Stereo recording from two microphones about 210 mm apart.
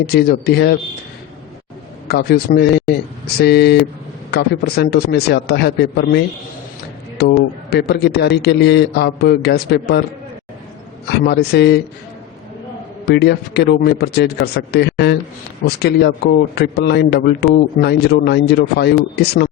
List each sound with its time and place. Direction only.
0.0 s a man's voice: 50° left (ahead or behind)
2.0 s a man's voice: 50° left (ahead or behind)
11.1 s a man's voice: 50° left (ahead or behind)
13.1 s a man's voice: 50° left (ahead or behind)